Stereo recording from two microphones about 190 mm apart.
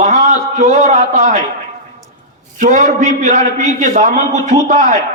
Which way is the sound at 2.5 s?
40° right (ahead or behind).